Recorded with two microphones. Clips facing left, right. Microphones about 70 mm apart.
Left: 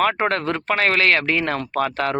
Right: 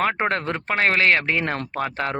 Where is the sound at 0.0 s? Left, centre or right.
Right.